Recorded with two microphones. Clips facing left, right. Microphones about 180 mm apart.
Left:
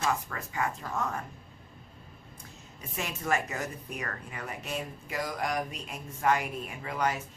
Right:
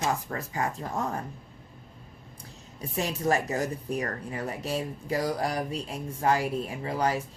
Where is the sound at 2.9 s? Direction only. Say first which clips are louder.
Right 5 dB; 35° right (ahead or behind).